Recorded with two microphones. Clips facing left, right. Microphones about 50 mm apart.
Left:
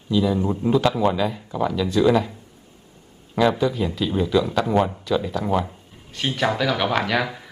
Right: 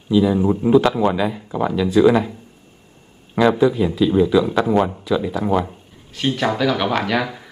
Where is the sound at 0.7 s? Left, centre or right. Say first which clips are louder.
Right 3 dB; centre.